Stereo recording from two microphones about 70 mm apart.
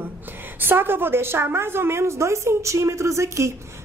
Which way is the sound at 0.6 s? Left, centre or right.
Right.